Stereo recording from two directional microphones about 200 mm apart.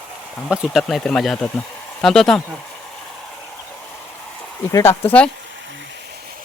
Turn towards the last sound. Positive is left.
turn(degrees=10)  # may be behind; listen again after turning